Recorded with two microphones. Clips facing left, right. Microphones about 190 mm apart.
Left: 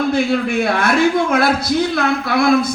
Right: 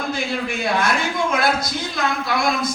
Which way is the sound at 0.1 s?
60° left (ahead or behind).